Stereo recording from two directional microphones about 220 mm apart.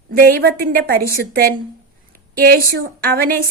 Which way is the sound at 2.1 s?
40° right (ahead or behind).